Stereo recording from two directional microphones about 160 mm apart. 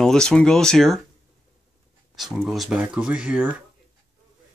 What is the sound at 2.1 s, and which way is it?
Speech, centre (ahead or behind).